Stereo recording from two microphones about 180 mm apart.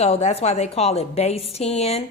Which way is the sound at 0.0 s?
35° left (ahead or behind).